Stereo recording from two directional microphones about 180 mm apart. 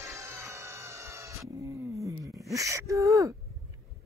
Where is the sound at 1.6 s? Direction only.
15° right (ahead or behind).